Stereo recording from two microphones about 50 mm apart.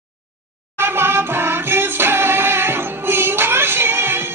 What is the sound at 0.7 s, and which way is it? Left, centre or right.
Music, right.